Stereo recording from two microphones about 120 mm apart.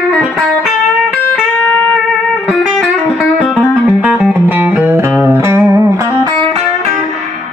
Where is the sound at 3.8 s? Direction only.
5° right (ahead or behind).